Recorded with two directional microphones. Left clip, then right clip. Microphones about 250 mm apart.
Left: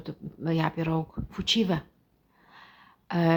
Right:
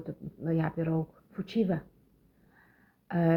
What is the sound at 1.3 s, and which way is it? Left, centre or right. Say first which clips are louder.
Speech: left 6 dB; centre.